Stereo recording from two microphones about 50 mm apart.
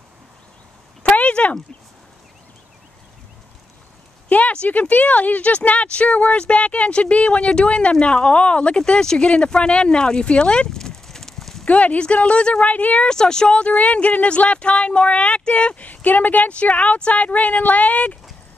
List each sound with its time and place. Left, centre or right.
1.0 s a sound: left
4.3 s speech: left; by 11.6 s centre
11.6 s speech: left
13.1 s speech: centre; by 18.1 s left